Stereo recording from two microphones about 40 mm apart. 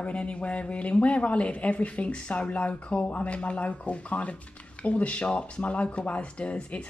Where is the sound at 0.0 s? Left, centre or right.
Left.